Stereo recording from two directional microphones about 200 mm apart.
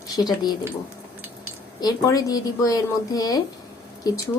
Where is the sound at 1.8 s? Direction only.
20° left (ahead or behind).